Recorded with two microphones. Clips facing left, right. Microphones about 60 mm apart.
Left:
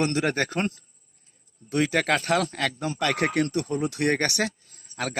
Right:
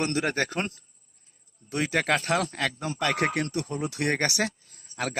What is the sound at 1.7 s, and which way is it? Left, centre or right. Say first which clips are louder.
Speech: left 2 dB; centre.